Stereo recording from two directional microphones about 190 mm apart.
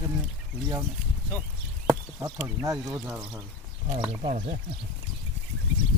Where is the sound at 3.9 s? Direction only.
35° right (ahead or behind).